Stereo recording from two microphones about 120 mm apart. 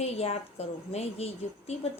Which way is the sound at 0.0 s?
60° left (ahead or behind).